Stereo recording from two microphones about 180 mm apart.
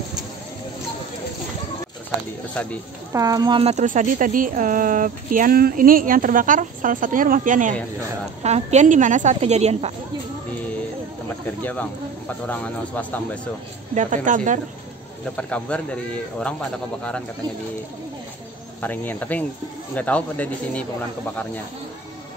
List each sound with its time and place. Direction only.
3.1 s speech: 20° right (ahead or behind)
3.7 s a woman's voice: 45° right (ahead or behind)
11.2 s speech: 10° left (ahead or behind)
13.9 s speech: 45° right (ahead or behind)
15.3 s speech: 5° left (ahead or behind)
18.8 s speech: 10° left (ahead or behind)